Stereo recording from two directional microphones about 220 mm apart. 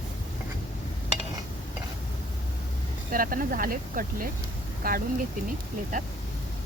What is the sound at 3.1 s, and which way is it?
Speech, 40° right (ahead or behind).